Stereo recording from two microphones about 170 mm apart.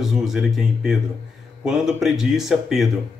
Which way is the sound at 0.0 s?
Centre (ahead or behind).